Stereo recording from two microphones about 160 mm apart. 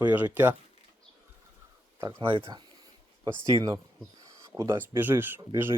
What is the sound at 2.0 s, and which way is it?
Speech, 30° right (ahead or behind).